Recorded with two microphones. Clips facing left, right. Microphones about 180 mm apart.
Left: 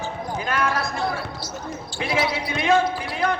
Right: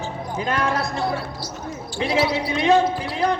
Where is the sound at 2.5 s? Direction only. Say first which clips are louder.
Right 2 dB; 35° right (ahead or behind).